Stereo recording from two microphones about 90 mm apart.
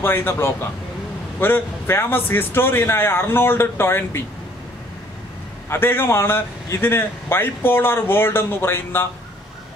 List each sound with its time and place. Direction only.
0.0 s a man's voice: 25° left (ahead or behind)
5.7 s a man's voice: 25° left (ahead or behind)